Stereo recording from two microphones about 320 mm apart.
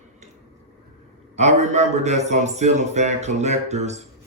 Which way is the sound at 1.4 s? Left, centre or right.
Right.